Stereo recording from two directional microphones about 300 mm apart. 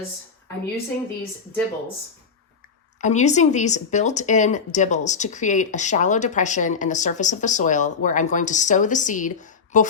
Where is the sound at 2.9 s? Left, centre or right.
Left.